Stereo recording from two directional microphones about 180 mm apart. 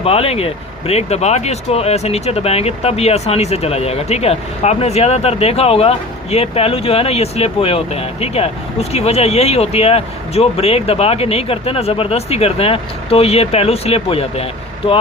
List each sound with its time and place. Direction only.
0.0 s speech: 35° left (ahead or behind)